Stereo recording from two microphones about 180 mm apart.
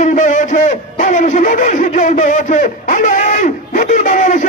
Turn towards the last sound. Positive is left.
turn(degrees=40)  # may be behind; listen again after turning